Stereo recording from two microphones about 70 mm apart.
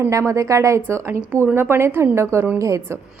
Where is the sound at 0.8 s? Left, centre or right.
Right.